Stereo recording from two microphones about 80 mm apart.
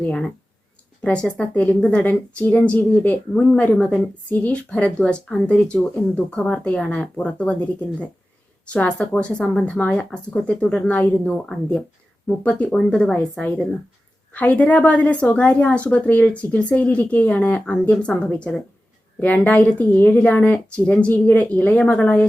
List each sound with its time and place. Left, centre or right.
0.0 s a woman's voice: centre
3.3 s a woman's voice: centre
12.4 s a woman's voice: centre
12.7 s speech: centre
14.3 s a woman's voice: centre